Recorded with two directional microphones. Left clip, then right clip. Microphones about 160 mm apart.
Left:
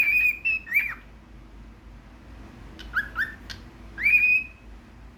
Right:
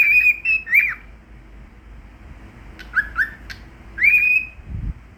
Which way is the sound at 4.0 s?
20° left (ahead or behind).